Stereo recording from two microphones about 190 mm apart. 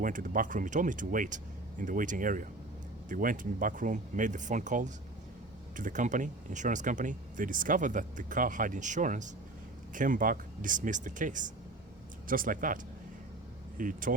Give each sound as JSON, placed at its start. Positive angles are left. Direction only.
{"t": 0.0, "sound": "speech", "side_deg": -45}